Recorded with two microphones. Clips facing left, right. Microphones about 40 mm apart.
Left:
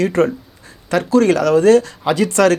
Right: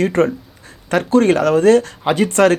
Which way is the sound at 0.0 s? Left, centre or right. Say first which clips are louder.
Even; right.